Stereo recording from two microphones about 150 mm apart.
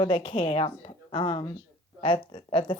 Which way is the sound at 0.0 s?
35° left (ahead or behind).